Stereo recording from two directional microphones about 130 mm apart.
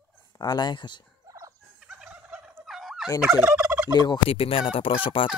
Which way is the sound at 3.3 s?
10° right (ahead or behind).